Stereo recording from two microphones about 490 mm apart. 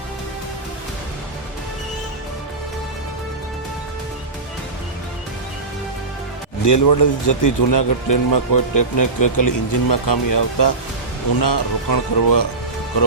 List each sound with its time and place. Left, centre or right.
6.7 s speech: left